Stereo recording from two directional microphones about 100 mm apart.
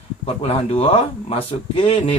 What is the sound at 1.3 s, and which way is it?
Speech, 70° left (ahead or behind).